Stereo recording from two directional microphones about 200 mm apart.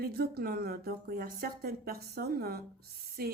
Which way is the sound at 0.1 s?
50° right (ahead or behind).